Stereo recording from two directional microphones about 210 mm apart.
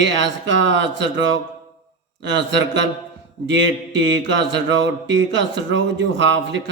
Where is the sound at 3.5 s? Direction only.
60° right (ahead or behind).